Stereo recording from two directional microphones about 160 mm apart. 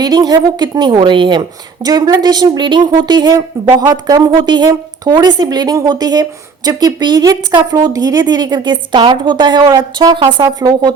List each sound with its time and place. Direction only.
0.0 s a woman's voice: 25° right (ahead or behind)